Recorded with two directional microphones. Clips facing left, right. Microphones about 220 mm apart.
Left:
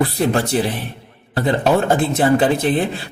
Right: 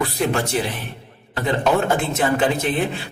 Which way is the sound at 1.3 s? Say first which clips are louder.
Left 3 dB; 35° left (ahead or behind).